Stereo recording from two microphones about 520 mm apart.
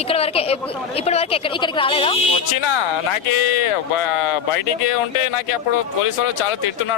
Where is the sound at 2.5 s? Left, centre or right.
Left.